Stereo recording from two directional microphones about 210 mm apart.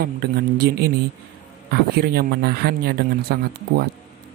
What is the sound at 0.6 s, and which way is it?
Speech, 50° right (ahead or behind).